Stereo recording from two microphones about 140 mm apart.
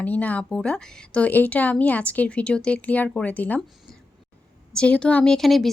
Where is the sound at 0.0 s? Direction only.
10° left (ahead or behind).